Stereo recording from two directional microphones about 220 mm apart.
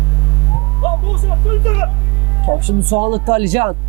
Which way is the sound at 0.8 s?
20° right (ahead or behind).